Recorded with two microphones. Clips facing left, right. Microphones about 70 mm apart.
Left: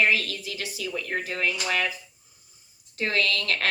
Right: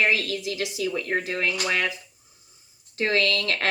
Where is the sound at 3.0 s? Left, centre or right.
Right.